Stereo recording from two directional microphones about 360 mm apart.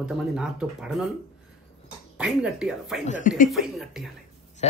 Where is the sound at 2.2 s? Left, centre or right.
Centre.